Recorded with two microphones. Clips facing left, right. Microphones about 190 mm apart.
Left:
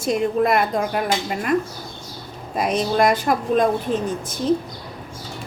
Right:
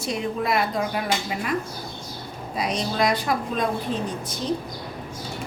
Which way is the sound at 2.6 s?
50° left (ahead or behind).